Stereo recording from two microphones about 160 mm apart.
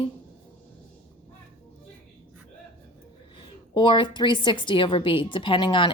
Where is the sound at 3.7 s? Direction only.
30° left (ahead or behind).